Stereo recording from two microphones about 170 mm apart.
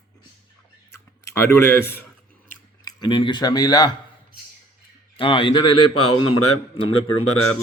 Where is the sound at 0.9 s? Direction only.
15° left (ahead or behind).